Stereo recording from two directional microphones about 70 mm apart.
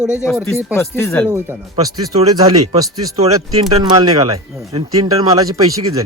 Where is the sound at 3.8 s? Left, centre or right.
Right.